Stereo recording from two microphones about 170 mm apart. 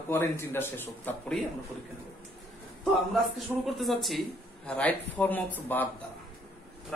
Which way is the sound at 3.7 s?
Centre (ahead or behind).